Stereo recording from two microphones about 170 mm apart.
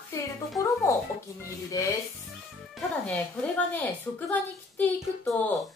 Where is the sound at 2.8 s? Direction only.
Centre (ahead or behind).